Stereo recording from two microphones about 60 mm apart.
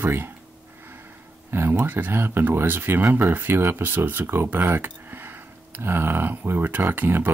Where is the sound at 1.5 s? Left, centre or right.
Right.